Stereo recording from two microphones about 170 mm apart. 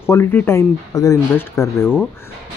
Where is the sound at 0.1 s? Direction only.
15° left (ahead or behind).